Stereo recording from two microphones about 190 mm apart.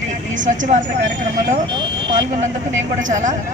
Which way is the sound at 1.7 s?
25° right (ahead or behind).